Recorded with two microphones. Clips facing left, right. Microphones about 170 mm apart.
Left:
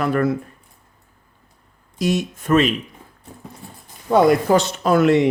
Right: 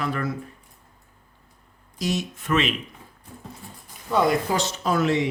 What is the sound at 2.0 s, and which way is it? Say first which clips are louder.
Speech: left 6 dB; 55° left (ahead or behind).